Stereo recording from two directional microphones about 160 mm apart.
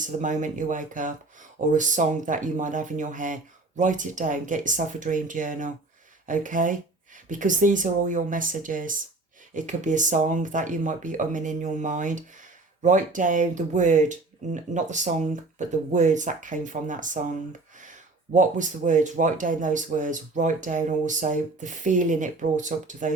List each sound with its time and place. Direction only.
0.0 s speech: 50° right (ahead or behind)
18.3 s speech: 50° right (ahead or behind)